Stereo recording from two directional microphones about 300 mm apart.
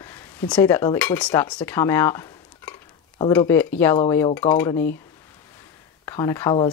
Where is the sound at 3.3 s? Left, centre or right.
Centre.